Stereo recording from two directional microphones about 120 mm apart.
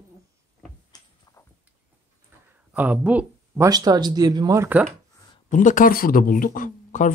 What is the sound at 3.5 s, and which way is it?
Speech, 30° right (ahead or behind).